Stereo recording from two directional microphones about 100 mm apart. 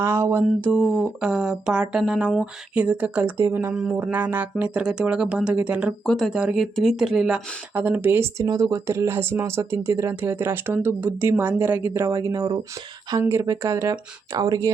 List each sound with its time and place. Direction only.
0.0 s speech: 25° right (ahead or behind)
0.7 s speech: 10° right (ahead or behind)
3.3 s speech: 25° right (ahead or behind)
6.1 s speech: 5° left (ahead or behind)
6.3 s speech: 10° right (ahead or behind)
8.4 s speech: 35° right (ahead or behind); by 11.9 s 20° right (ahead or behind)
11.9 s speech: 35° right (ahead or behind)